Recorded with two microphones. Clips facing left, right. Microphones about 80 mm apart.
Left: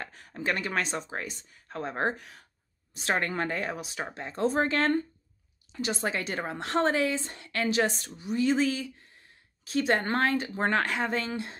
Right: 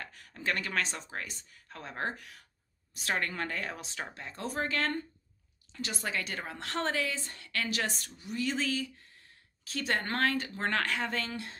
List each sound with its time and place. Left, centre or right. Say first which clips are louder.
0.0 s a sound: left 4 dB; left
0.4 s a woman's voice: left 3 dB; centre
5.7 s a woman's voice: left 6 dB; left